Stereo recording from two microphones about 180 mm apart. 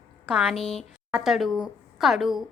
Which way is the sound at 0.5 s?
35° left (ahead or behind).